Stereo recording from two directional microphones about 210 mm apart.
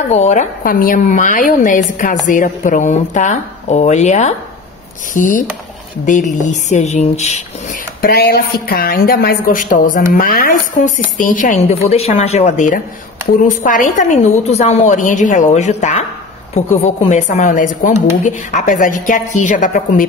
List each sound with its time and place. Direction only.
0.1 s a woman's voice: 35° left (ahead or behind)
8.0 s a woman's voice: 45° left (ahead or behind)